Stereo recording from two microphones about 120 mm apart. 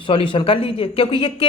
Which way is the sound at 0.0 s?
45° left (ahead or behind).